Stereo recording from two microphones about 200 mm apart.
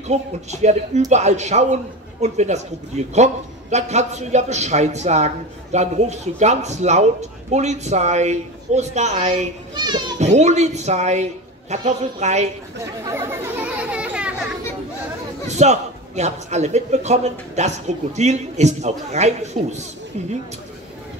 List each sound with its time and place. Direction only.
0.1 s a man's voice: 35° right (ahead or behind)
9.8 s children playing: 20° right (ahead or behind)
10.1 s a man's voice: 35° right (ahead or behind)
13.1 s children playing: 10° right (ahead or behind)
15.4 s a man's voice: 35° right (ahead or behind)